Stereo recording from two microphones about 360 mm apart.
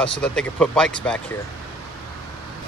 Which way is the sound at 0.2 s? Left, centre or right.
Centre.